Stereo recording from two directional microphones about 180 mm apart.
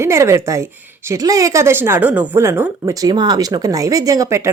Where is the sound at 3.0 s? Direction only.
25° right (ahead or behind).